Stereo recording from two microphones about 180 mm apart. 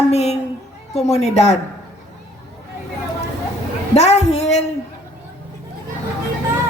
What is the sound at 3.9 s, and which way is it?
Speech, 35° left (ahead or behind).